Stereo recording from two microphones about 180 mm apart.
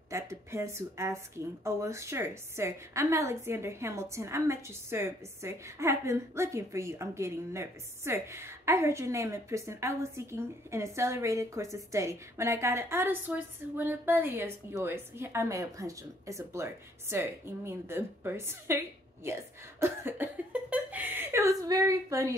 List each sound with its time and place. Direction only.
0.1 s speech: 15° right (ahead or behind)
20.7 s whimper: 10° right (ahead or behind)